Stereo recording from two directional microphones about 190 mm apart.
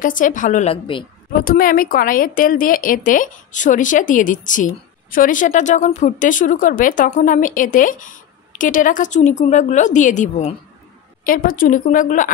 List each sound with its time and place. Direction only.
0.0 s a woman's voice: 45° left (ahead or behind)